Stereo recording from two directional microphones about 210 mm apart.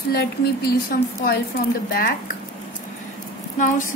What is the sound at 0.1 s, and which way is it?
Speech, 50° left (ahead or behind).